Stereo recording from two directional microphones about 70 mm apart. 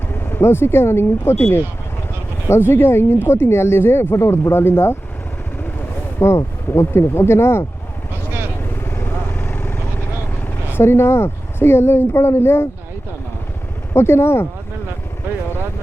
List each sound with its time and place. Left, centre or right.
0.1 s speech: left
6.1 s speech: left
8.8 s vehicle: left
10.4 s speech: left
13.9 s speech: left